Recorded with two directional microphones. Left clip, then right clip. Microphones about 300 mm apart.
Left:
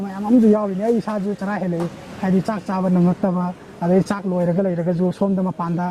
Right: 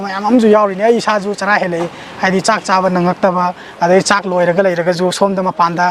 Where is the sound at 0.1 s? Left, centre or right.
Centre.